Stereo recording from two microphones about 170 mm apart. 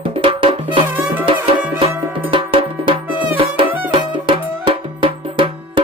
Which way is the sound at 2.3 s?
30° right (ahead or behind).